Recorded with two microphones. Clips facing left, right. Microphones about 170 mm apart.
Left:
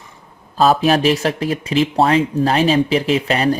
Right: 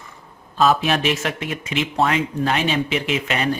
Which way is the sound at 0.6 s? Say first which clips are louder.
Left 4 dB; 35° left (ahead or behind).